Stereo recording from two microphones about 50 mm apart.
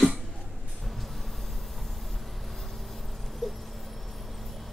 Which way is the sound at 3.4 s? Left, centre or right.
Centre.